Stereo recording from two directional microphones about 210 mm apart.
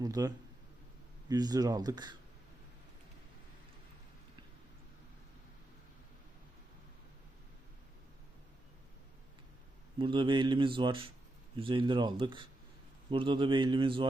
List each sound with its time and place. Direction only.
0.0 s speech: 15° right (ahead or behind)
10.0 s speech: 25° right (ahead or behind)